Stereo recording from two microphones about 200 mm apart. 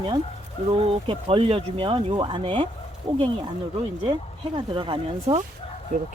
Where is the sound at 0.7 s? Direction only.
25° right (ahead or behind).